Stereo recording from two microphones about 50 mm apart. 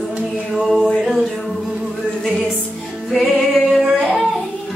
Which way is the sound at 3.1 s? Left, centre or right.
Centre.